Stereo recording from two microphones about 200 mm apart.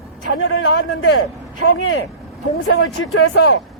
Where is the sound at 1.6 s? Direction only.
80° left.